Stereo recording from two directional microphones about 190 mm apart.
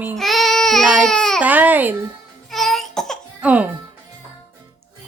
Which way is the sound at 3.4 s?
5° right (ahead or behind).